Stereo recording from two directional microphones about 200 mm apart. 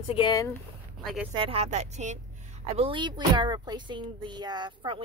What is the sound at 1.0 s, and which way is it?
Speech, 5° right (ahead or behind).